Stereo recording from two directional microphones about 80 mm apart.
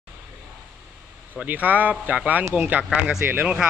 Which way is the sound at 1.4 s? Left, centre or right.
Right.